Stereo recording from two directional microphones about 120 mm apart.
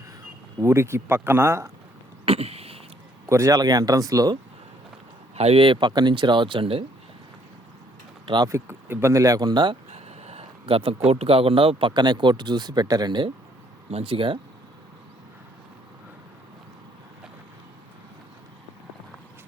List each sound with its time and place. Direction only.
0.6 s speech: 20° right (ahead or behind)
2.2 s a sound: 55° right (ahead or behind)
3.2 s speech: 25° right (ahead or behind)
5.4 s speech: 55° right (ahead or behind)
8.4 s speech: 20° right (ahead or behind); by 9.7 s 35° right (ahead or behind)
9.9 s a sound: 60° right (ahead or behind)
11.1 s speech: 55° right (ahead or behind); by 13.3 s 40° right (ahead or behind)
13.9 s speech: 50° right (ahead or behind)